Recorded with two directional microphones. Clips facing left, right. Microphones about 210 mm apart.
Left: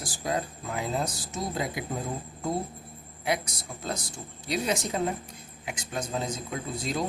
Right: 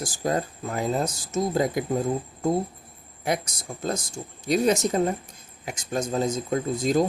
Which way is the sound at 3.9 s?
45° right (ahead or behind).